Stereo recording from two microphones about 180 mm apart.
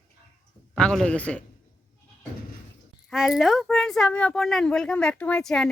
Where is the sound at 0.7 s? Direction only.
5° left (ahead or behind).